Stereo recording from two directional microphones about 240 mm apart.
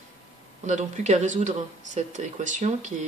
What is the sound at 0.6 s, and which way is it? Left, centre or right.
Speech, right.